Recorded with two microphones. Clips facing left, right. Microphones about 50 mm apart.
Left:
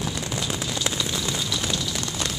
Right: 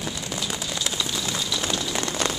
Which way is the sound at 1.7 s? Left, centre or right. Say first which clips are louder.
Right 2 dB; right.